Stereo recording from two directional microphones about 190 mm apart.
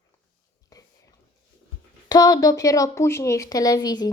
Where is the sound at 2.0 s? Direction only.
20° left (ahead or behind).